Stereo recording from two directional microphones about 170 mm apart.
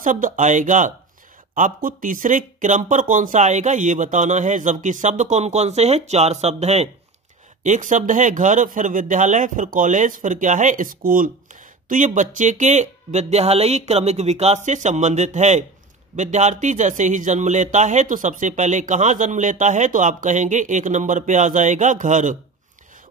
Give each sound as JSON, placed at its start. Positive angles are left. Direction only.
{"t": 0.0, "sound": "speech", "side_deg": -50}